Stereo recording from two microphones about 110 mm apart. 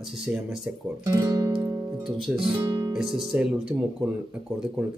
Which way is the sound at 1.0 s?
30° right (ahead or behind).